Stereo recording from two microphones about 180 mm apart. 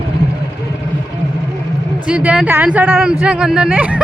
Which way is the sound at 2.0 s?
5° right (ahead or behind).